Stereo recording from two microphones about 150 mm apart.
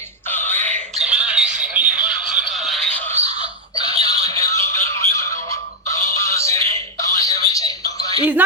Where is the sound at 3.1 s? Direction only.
45° right (ahead or behind).